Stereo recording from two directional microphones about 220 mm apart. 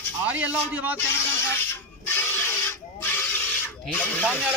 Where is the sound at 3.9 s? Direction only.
10° left (ahead or behind).